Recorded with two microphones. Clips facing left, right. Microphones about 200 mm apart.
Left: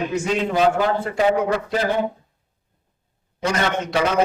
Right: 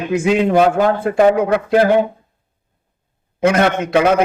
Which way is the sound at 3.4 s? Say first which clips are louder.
Right 8 dB; 55° right (ahead or behind).